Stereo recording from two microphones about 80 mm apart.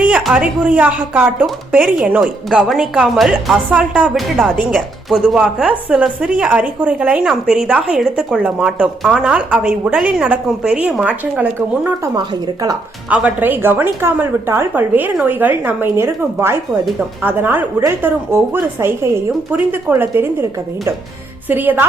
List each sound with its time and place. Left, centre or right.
0.3 s a woman's voice: centre
2.2 s a woman's voice: centre
3.2 s speech: centre
3.7 s a woman's voice: centre
4.1 s a woman's voice: centre
13.1 s a woman's voice: centre